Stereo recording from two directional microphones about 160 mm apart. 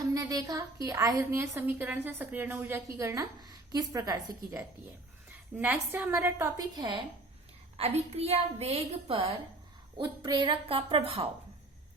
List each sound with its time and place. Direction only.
0.1 s a woman's voice: 20° right (ahead or behind)
5.3 s a woman's voice: 10° right (ahead or behind)
7.8 s a woman's voice: 40° right (ahead or behind)